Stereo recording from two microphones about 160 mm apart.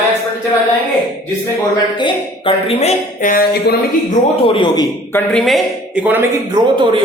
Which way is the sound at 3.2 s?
65° left (ahead or behind).